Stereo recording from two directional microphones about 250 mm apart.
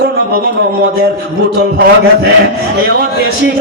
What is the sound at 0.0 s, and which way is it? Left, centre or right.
Speech, right.